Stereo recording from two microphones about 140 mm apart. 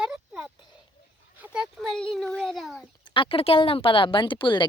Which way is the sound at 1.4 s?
5° right (ahead or behind).